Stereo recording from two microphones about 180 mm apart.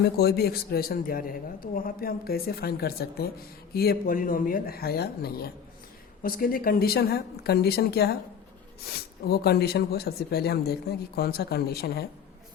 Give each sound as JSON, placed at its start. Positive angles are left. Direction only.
{"t": 0.0, "sound": "a man's voice", "side_deg": 60}